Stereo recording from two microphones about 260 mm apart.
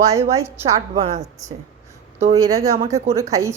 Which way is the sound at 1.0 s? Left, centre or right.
Right.